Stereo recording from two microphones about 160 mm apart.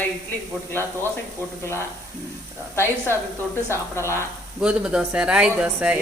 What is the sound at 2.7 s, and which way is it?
A woman's voice, 15° left (ahead or behind).